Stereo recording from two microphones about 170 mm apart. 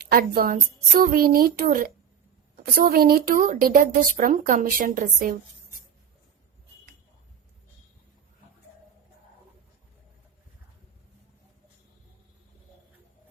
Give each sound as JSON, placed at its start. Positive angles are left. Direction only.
{"t": 0.0, "sound": "speech", "side_deg": -60}